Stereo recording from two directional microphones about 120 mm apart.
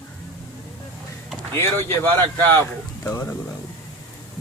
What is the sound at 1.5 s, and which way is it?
Speech, 20° left (ahead or behind).